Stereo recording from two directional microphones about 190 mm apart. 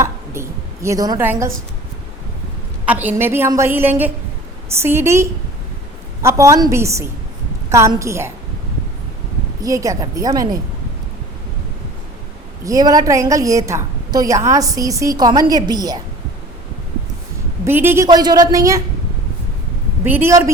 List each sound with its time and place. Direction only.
0.0 s a sound: 15° right (ahead or behind)
2.8 s a woman's voice: 10° right (ahead or behind)
9.6 s a woman's voice: 15° right (ahead or behind)
12.6 s a woman's voice: 20° right (ahead or behind)
17.7 s a woman's voice: 10° right (ahead or behind)
20.1 s a woman's voice: 10° right (ahead or behind)